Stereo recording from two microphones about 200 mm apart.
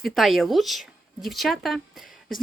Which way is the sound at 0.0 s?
Centre (ahead or behind).